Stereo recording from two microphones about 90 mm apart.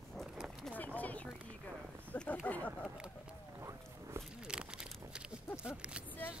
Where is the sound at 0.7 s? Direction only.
15° left (ahead or behind).